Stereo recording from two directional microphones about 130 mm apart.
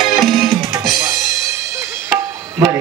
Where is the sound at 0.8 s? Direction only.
Centre (ahead or behind).